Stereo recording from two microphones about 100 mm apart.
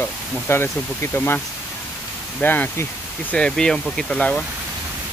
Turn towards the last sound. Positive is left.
turn(degrees=5)  # may be behind; listen again after turning